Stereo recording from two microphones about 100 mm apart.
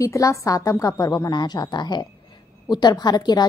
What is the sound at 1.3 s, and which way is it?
A woman's voice, 45° left (ahead or behind).